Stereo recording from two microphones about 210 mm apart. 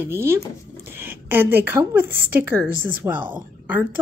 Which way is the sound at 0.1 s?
10° right (ahead or behind).